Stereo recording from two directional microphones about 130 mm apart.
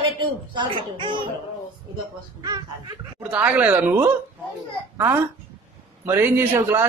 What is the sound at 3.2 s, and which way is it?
A child's voice, 10° right (ahead or behind).